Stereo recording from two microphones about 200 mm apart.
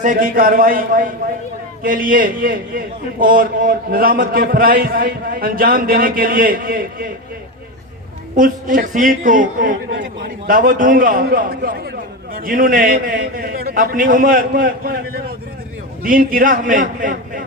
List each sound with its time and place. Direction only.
0.0 s a man's voice: 40° right (ahead or behind)
8.4 s a man's voice: 40° right (ahead or behind)